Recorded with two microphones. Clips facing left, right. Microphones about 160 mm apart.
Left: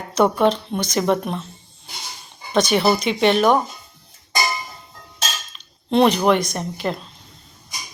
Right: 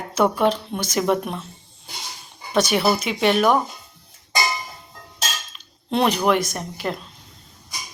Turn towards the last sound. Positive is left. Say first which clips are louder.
# left 3 dB
turn(degrees=-5)  # may be behind; listen again after turning